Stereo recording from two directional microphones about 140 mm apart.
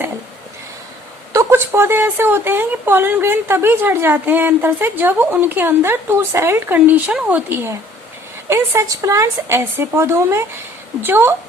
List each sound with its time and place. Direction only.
1.3 s a woman's voice: 20° right (ahead or behind)